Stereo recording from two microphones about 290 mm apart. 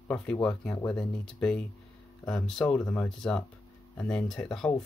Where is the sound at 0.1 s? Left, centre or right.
Centre.